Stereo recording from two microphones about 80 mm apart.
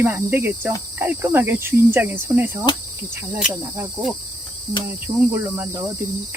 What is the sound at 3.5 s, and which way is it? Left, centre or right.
Cricket, right.